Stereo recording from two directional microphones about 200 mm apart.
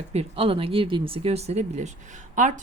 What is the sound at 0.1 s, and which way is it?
A woman's voice, 30° right (ahead or behind).